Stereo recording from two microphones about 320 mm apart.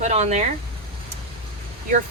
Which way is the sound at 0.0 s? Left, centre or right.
Right.